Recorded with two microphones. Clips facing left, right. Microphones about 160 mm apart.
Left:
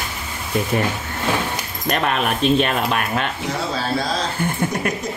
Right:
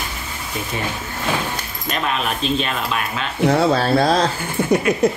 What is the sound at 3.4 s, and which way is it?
Speech, 60° right (ahead or behind).